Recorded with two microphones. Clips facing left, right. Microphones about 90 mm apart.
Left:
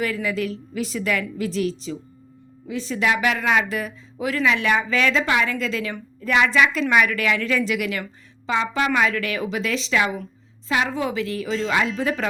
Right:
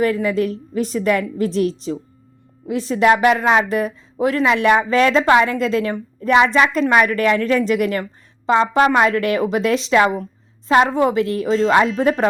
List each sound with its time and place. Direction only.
0.0 s speech: 45° right (ahead or behind)
4.9 s a woman's voice: 40° right (ahead or behind)